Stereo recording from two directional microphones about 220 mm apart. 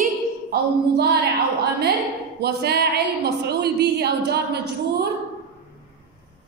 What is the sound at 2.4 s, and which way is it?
A woman's voice, 50° right (ahead or behind).